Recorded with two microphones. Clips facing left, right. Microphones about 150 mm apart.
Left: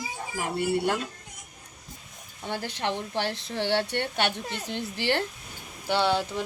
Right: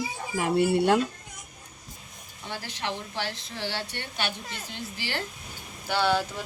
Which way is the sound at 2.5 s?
50° left (ahead or behind).